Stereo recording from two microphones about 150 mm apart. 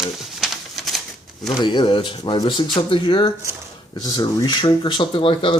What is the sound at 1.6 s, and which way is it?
Speech, 30° left (ahead or behind).